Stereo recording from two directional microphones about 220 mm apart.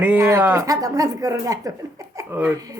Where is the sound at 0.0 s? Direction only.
10° right (ahead or behind).